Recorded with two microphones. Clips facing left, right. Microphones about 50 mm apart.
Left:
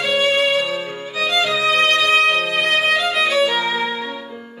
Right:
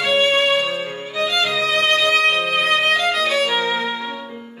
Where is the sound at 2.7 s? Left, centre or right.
Centre.